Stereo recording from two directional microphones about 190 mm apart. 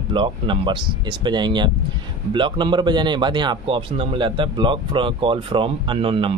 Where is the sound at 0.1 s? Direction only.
25° right (ahead or behind).